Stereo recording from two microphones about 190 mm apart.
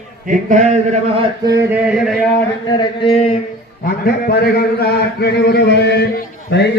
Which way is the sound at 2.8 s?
25° left (ahead or behind).